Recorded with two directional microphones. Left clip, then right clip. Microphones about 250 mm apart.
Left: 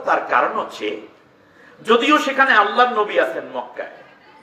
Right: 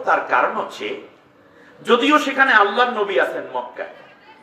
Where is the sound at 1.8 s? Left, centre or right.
Centre.